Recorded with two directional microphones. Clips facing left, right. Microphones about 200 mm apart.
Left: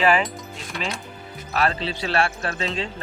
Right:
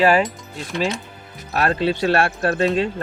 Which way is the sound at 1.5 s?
50° right (ahead or behind).